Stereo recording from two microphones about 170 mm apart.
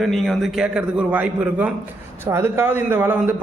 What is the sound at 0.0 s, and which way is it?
A man's voice, centre (ahead or behind).